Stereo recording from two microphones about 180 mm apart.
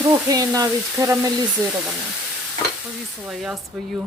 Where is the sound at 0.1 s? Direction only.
20° right (ahead or behind).